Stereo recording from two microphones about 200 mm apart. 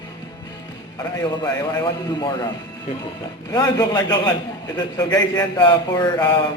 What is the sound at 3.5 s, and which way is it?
A man's voice, 15° left (ahead or behind).